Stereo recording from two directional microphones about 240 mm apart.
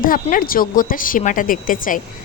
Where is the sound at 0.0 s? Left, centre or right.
Left.